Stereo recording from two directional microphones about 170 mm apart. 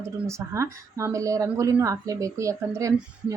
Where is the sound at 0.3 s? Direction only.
15° right (ahead or behind).